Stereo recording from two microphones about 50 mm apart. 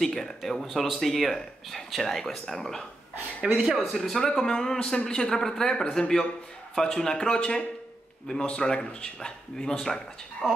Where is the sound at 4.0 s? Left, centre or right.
Centre.